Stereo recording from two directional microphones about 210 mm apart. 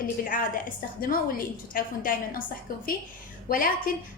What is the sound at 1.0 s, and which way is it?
A woman's voice, 45° left (ahead or behind).